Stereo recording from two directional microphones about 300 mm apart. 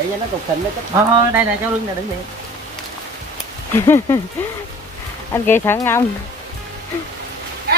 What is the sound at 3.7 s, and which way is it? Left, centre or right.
Speech, centre.